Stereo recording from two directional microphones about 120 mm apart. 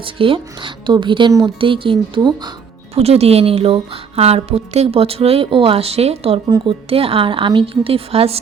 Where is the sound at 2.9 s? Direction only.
60° right (ahead or behind).